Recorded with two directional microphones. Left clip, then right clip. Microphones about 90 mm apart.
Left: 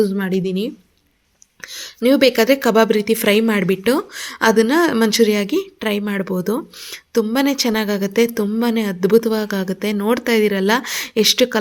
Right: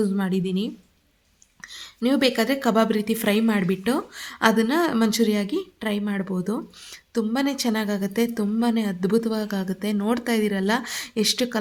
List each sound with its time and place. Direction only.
0.0 s a woman's voice: centre (ahead or behind)
1.6 s a woman's voice: 15° left (ahead or behind)